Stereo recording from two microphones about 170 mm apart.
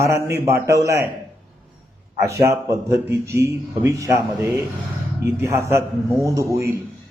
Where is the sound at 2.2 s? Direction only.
15° right (ahead or behind).